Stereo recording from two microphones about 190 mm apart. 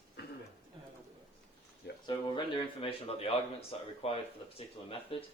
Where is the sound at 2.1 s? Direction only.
25° left (ahead or behind).